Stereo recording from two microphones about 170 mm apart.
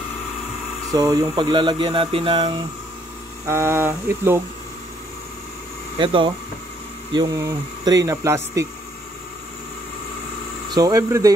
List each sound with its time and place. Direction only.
0.9 s speech: 20° right (ahead or behind)
3.4 s speech: 15° right (ahead or behind)
5.9 s speech: 30° right (ahead or behind)
10.7 s speech: 20° right (ahead or behind)